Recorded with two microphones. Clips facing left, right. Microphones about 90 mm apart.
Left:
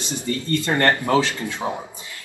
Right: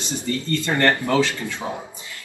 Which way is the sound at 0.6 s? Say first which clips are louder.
Even; 20° left (ahead or behind).